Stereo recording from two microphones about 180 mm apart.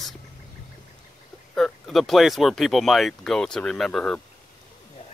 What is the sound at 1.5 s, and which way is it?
Speech, centre (ahead or behind).